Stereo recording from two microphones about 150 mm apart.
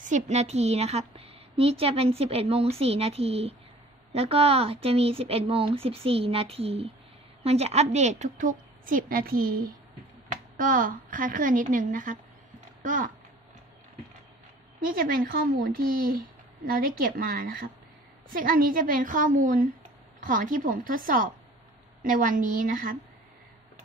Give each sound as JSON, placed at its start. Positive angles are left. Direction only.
{"t": 0.0, "sound": "a woman's voice", "side_deg": -50}
{"t": 10.3, "sound": "a woman's voice", "side_deg": -65}
{"t": 14.8, "sound": "a woman's voice", "side_deg": -70}